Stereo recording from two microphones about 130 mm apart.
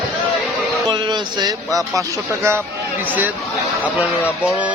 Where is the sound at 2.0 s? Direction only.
20° right (ahead or behind).